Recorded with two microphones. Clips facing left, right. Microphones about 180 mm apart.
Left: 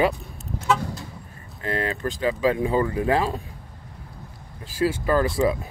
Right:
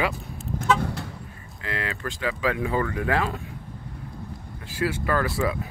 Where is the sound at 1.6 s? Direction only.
40° left (ahead or behind).